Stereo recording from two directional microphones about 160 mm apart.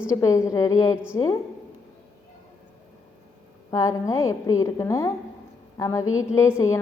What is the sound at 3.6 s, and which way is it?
A woman's voice, 20° left (ahead or behind).